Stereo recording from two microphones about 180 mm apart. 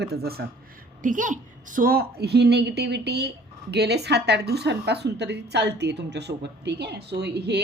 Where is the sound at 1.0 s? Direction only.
45° right (ahead or behind).